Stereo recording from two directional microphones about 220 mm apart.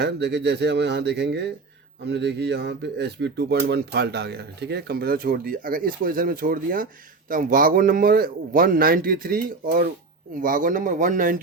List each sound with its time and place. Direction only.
0.0 s a man's voice: 50° right (ahead or behind)